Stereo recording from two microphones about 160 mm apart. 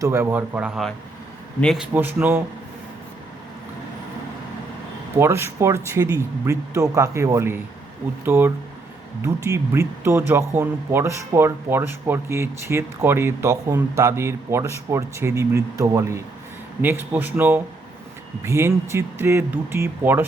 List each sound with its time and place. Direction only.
0.0 s speech: 15° right (ahead or behind)
5.1 s speech: 15° right (ahead or behind)